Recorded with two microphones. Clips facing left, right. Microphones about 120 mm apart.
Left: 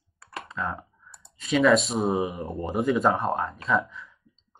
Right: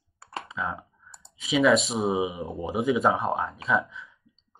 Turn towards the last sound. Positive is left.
turn(degrees=0)  # may be behind; listen again after turning